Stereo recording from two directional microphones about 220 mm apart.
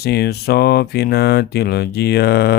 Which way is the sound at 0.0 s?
45° left (ahead or behind).